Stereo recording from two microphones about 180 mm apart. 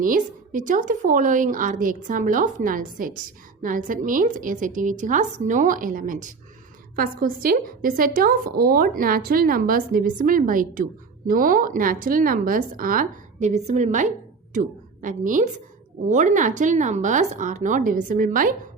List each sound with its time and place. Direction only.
0.0 s a woman's voice: 45° right (ahead or behind)